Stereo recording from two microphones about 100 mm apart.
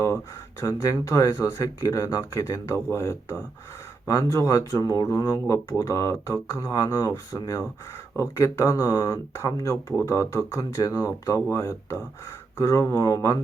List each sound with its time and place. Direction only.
0.6 s speech: 35° left (ahead or behind)